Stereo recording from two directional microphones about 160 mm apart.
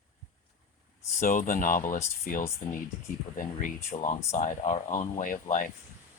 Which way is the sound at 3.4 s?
55° left (ahead or behind).